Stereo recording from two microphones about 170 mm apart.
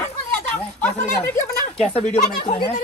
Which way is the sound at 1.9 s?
40° left (ahead or behind).